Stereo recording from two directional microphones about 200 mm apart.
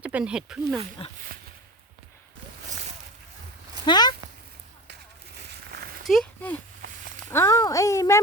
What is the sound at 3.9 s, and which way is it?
Speech, 20° left (ahead or behind).